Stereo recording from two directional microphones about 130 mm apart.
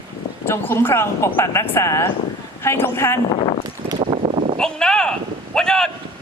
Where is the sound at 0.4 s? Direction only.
15° left (ahead or behind).